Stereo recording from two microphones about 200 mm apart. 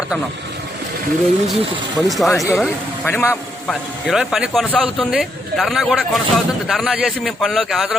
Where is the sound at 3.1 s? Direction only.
10° left (ahead or behind).